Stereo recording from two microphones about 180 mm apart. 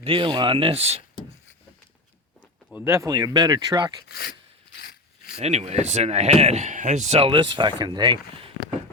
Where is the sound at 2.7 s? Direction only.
15° right (ahead or behind).